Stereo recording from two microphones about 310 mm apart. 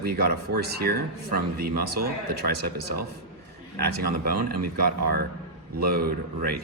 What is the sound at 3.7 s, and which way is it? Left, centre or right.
Speech, right.